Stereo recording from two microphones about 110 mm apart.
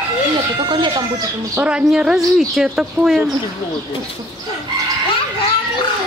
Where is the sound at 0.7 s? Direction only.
40° right (ahead or behind).